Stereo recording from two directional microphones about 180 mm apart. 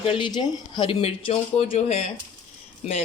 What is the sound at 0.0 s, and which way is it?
Speech, 25° left (ahead or behind).